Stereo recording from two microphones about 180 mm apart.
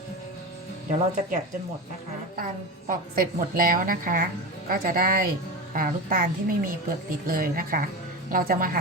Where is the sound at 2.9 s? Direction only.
50° right (ahead or behind).